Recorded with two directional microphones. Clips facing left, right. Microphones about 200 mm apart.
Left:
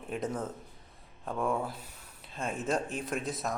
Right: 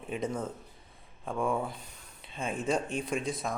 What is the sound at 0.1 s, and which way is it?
Speech, centre (ahead or behind).